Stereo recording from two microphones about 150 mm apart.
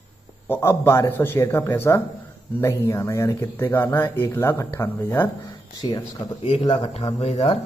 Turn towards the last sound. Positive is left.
turn(degrees=40)  # may be behind; listen again after turning